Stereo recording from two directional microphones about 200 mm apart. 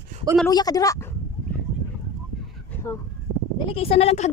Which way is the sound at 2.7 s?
10° left (ahead or behind).